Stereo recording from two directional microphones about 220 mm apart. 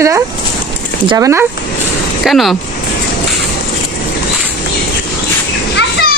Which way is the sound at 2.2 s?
Centre (ahead or behind).